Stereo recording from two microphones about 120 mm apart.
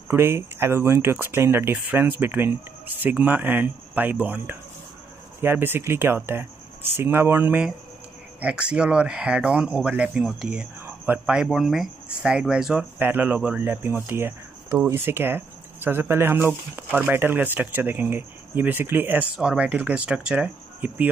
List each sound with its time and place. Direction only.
0.1 s speech: 20° right (ahead or behind)
19.3 s speech: 5° right (ahead or behind)